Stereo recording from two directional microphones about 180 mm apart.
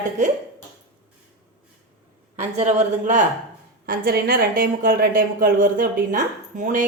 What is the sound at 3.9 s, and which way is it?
A woman's voice, 60° right (ahead or behind).